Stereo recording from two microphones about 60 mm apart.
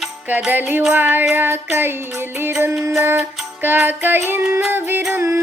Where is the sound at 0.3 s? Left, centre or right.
Right.